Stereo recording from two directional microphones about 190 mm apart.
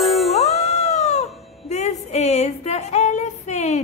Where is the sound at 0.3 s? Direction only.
35° left (ahead or behind).